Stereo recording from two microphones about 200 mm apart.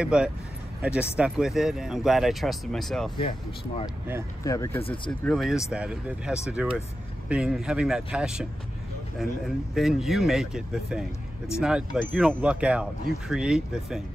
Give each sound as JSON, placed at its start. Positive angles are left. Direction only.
{"t": 0.0, "sound": "speech", "side_deg": -5}
{"t": 3.2, "sound": "speech", "side_deg": 25}
{"t": 4.5, "sound": "speech", "side_deg": 15}
{"t": 5.2, "sound": "speech", "side_deg": 0}
{"t": 9.8, "sound": "speech", "side_deg": 0}